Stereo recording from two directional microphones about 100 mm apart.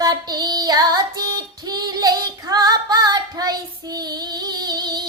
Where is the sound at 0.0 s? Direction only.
40° right (ahead or behind).